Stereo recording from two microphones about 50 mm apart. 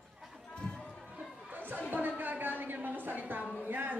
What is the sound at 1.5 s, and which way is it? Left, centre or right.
Chatter, right.